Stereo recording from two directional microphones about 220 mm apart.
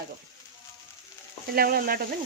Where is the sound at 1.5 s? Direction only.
40° right (ahead or behind).